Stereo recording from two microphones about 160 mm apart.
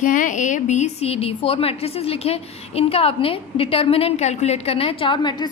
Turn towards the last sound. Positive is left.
turn(degrees=30)  # may be behind; listen again after turning